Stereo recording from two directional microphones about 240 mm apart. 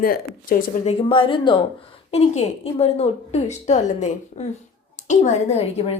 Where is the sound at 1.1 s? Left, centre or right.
Left.